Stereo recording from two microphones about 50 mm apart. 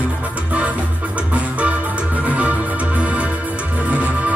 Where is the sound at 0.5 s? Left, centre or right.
Right.